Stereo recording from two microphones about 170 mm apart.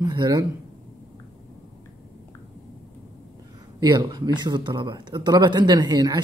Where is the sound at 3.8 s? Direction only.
25° right (ahead or behind).